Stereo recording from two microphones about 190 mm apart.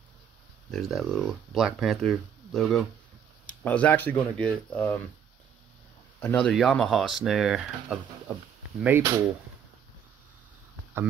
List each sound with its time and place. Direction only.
0.7 s speech: centre (ahead or behind)
6.1 s speech: 10° left (ahead or behind)
8.8 s speech: 15° right (ahead or behind)